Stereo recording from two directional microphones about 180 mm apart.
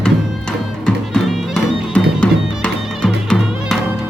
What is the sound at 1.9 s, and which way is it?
Music, 5° left (ahead or behind).